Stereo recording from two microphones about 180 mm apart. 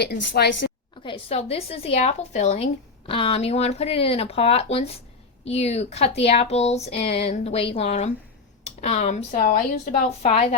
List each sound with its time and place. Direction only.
0.0 s a woman's voice: 65° left (ahead or behind)
1.0 s speech: 35° left (ahead or behind)